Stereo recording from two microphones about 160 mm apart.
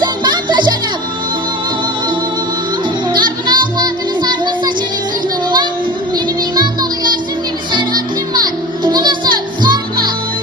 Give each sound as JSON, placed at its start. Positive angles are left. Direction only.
{"t": 0.0, "sound": "music", "side_deg": -30}
{"t": 3.1, "sound": "music", "side_deg": -25}
{"t": 6.1, "sound": "music", "side_deg": -25}